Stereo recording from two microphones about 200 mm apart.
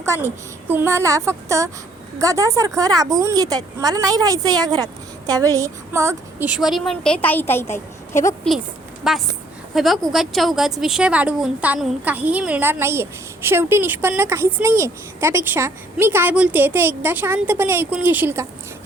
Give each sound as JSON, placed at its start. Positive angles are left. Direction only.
{"t": 0.0, "sound": "a woman's voice", "side_deg": -10}
{"t": 9.0, "sound": "a woman's voice", "side_deg": 0}